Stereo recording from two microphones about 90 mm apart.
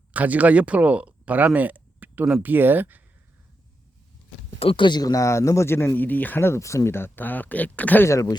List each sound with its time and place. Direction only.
0.1 s speech: 15° right (ahead or behind)
4.6 s speech: 70° left (ahead or behind); by 8.0 s 20° left (ahead or behind)
8.0 s speech: 35° left (ahead or behind)